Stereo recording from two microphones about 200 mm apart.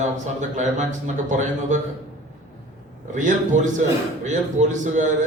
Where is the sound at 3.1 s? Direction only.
40° right (ahead or behind).